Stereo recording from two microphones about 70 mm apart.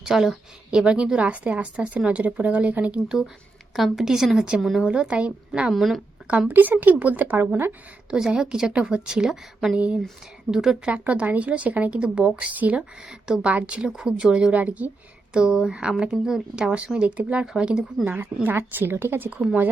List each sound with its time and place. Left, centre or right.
0.0 s a woman's voice: centre
3.8 s a woman's voice: centre
4.9 s a woman's voice: centre
5.7 s a woman's voice: centre
6.5 s speech: right
8.1 s a woman's voice: centre
9.7 s a woman's voice: centre
18.0 s speech: right
19.3 s speech: centre